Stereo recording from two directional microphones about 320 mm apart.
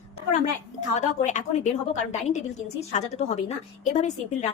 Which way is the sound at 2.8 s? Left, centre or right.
Centre.